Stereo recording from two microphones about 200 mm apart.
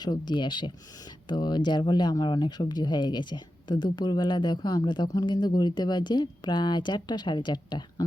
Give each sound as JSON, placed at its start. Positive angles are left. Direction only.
{"t": 0.0, "sound": "speech", "side_deg": 20}